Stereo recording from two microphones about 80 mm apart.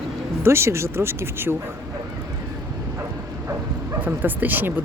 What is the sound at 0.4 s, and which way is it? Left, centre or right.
Speech, right.